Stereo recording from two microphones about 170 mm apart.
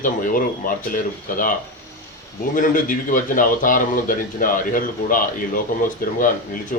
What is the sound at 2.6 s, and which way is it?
Speech, 50° left (ahead or behind).